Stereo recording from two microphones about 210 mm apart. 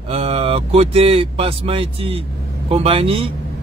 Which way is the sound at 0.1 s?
30° right (ahead or behind).